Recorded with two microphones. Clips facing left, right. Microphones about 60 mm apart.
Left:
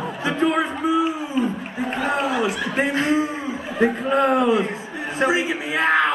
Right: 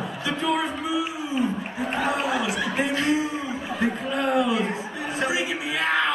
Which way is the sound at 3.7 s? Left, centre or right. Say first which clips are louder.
Left 8 dB; left.